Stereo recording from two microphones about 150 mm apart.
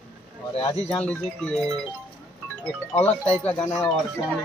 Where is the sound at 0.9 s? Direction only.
5° left (ahead or behind).